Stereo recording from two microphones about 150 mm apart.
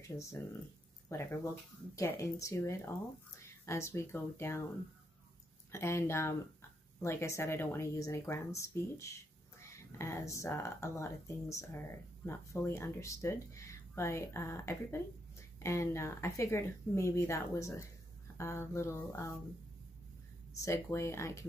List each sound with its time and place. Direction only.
0.2 s speech: 20° left (ahead or behind)
5.7 s speech: 15° left (ahead or behind)
20.5 s speech: 20° left (ahead or behind)